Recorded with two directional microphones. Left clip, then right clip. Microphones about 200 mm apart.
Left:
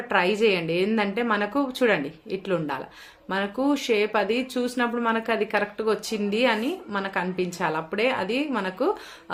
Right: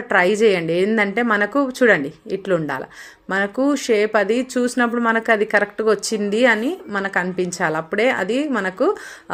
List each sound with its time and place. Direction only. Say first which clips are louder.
0.1 s speech: right 6 dB; 35° right (ahead or behind)